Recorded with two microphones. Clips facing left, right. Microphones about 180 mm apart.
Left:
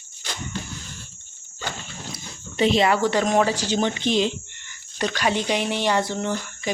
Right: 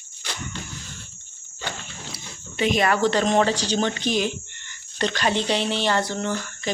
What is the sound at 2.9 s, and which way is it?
Speech, 10° left (ahead or behind).